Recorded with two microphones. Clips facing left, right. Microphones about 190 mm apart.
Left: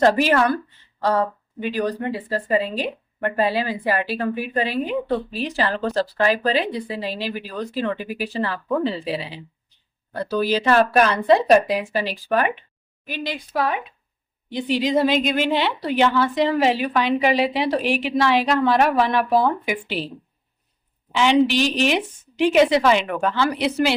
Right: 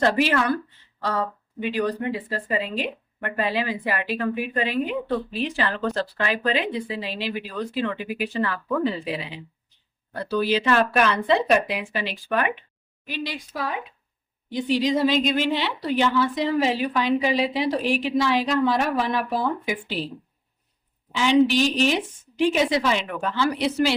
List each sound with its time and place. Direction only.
0.0 s a woman's voice: 40° left (ahead or behind)
1.7 s speech: 40° left (ahead or behind)
10.2 s speech: 40° left (ahead or behind)
13.1 s a woman's voice: 50° left (ahead or behind); by 20.1 s 70° left (ahead or behind)
21.1 s a woman's voice: 70° left (ahead or behind)